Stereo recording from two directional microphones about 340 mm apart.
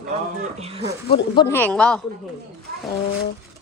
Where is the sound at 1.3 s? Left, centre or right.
Centre.